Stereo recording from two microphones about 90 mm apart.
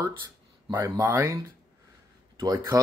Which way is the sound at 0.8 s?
40° right (ahead or behind).